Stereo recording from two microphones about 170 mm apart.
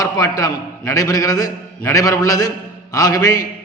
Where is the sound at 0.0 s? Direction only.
20° left (ahead or behind).